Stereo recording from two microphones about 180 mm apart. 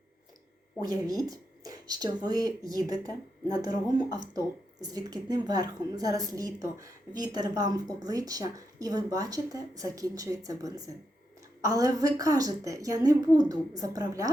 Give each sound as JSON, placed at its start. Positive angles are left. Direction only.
{"t": 0.8, "sound": "speech", "side_deg": -20}